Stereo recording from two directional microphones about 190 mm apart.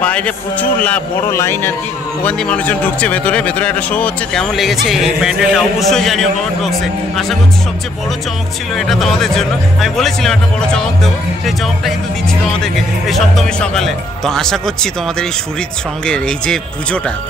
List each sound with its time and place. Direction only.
0.0 s a man's voice: 5° left (ahead or behind)
8.7 s a man's voice: centre (ahead or behind)